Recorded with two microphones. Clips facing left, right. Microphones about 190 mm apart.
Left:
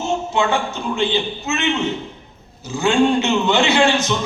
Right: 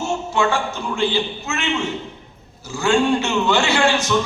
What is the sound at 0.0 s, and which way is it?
A man's voice, 20° left (ahead or behind).